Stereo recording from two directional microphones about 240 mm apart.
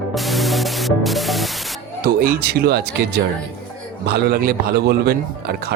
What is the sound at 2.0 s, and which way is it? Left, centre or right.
Speech, right.